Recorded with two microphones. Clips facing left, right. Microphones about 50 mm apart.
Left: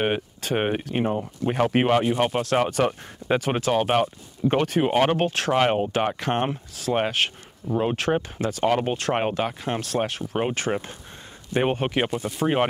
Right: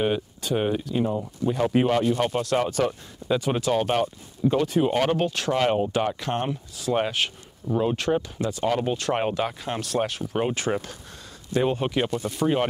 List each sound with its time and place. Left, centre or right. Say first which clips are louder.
0.0 s speech: even; left
2.0 s speech: left 1 dB; left
2.4 s speech: left 2 dB; left
4.5 s speech: even; left
4.9 s speech: left 2 dB; left
9.2 s speech: left 1 dB; left
10.7 s speech: even; centre
11.5 s speech: left 1 dB; left